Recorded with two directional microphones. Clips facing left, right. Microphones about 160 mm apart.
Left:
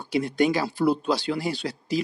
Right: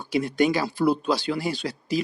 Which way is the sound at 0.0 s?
30° left (ahead or behind).